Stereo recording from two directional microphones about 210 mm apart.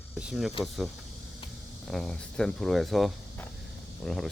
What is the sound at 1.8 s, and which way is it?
Speech, centre (ahead or behind).